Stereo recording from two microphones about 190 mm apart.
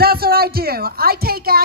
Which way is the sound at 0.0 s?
55° right (ahead or behind).